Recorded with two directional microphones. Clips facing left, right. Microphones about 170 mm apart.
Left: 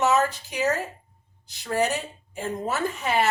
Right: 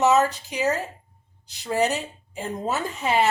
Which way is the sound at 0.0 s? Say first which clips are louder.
Right 3 dB; 20° right (ahead or behind).